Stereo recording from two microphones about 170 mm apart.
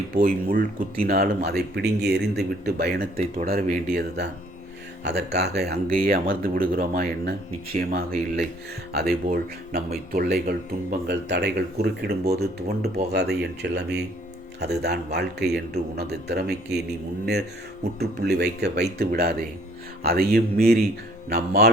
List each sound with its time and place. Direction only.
0.2 s speech: 55° right (ahead or behind)
3.4 s speech: 60° right (ahead or behind)
5.0 s speech: 75° right (ahead or behind)
18.0 s speech: 75° right (ahead or behind)